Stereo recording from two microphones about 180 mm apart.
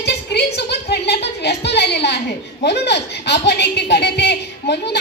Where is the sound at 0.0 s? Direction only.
70° left (ahead or behind).